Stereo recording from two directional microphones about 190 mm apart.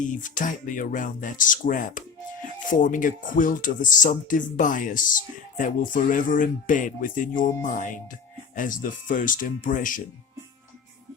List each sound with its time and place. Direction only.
0.0 s speech: 45° left (ahead or behind)